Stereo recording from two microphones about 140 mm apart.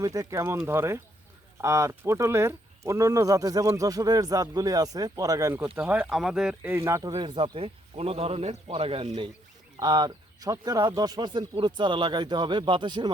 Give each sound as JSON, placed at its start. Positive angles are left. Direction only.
{"t": 0.0, "sound": "speech", "side_deg": -25}
{"t": 7.2, "sound": "a man's voice", "side_deg": -35}